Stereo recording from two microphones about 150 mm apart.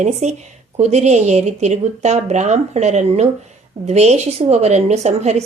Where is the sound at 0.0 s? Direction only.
50° right (ahead or behind).